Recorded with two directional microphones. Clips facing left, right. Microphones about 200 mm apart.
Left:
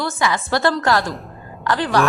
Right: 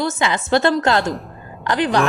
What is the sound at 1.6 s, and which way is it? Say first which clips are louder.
Speech: right 1 dB; 20° right (ahead or behind).